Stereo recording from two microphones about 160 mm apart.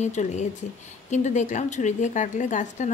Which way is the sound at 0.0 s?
45° left (ahead or behind).